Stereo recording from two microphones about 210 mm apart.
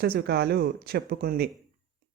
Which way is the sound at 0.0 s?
50° right (ahead or behind).